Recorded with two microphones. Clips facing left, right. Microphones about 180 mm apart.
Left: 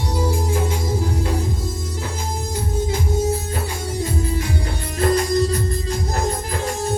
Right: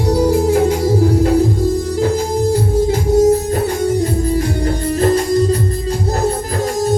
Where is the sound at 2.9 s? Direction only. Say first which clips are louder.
Right 11 dB; 40° right (ahead or behind).